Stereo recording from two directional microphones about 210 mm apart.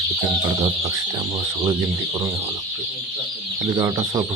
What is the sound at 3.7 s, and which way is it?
Fowl, 20° right (ahead or behind).